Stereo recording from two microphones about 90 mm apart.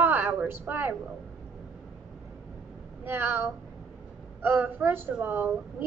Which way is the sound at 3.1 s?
25° right (ahead or behind).